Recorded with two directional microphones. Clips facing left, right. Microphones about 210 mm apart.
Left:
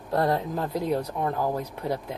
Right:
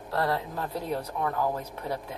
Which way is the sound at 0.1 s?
20° left (ahead or behind).